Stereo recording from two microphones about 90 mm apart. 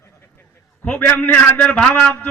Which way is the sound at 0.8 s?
15° left (ahead or behind).